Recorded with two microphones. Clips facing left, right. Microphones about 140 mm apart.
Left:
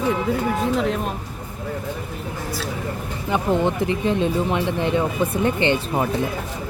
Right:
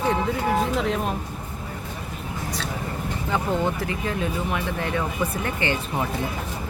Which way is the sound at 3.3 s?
20° left (ahead or behind).